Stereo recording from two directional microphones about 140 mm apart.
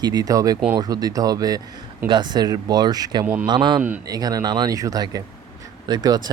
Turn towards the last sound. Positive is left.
turn(degrees=-30)  # may be behind; listen again after turning